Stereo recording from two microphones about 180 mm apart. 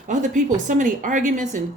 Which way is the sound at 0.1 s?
45° right (ahead or behind).